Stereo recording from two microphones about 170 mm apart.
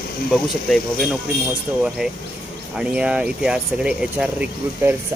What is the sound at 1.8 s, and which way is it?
Speech, 5° right (ahead or behind).